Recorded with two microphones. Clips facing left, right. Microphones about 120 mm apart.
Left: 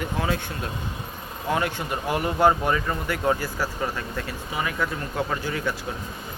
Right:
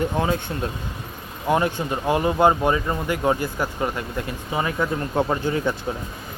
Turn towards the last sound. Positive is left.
turn(degrees=-25)  # may be behind; listen again after turning